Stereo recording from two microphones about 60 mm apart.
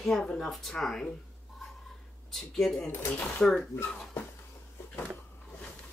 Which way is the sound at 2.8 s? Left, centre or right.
Left.